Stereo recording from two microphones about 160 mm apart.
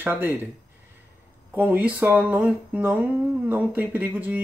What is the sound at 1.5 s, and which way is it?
Speech, 10° right (ahead or behind).